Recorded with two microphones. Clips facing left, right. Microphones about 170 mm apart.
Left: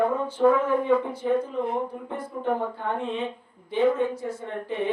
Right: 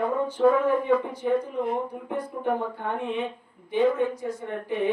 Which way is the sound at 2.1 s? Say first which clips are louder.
Right 1 dB; 15° right (ahead or behind).